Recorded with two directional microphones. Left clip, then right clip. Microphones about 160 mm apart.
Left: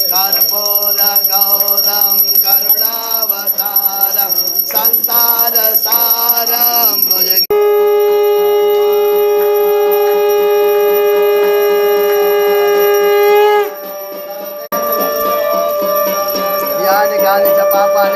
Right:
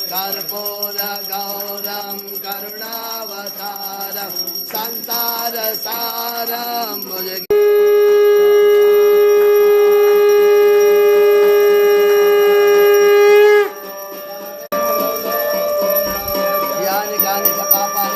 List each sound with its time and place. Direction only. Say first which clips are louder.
7.4 s music: even; 20° right (ahead or behind); by 13.7 s 35° right (ahead or behind)
16.8 s music: left 8 dB; 10° left (ahead or behind)